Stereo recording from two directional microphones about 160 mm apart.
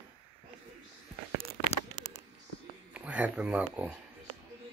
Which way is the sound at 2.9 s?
10° right (ahead or behind).